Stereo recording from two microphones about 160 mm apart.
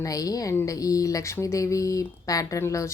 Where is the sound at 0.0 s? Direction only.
20° left (ahead or behind).